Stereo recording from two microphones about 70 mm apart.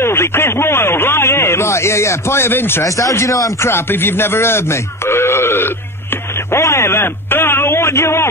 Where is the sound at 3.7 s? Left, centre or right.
Left.